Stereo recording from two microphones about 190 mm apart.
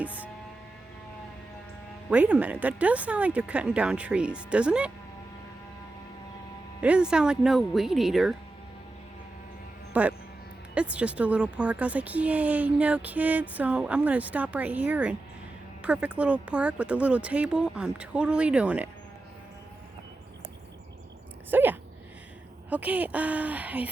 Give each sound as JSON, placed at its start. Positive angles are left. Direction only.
{"t": 0.0, "sound": "a sound", "side_deg": -10}
{"t": 2.0, "sound": "speech", "side_deg": -5}
{"t": 6.8, "sound": "speech", "side_deg": -5}
{"t": 9.9, "sound": "speech", "side_deg": -5}
{"t": 21.5, "sound": "speech", "side_deg": -10}